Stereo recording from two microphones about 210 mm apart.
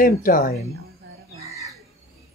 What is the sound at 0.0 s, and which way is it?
Speech, 40° left (ahead or behind).